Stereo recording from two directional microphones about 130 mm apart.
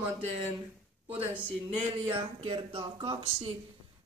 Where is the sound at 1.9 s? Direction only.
45° right (ahead or behind).